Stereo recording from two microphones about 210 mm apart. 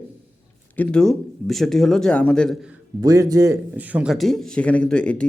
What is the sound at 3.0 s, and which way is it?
Speech, 15° right (ahead or behind).